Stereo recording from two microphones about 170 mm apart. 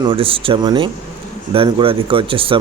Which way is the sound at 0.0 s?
30° right (ahead or behind).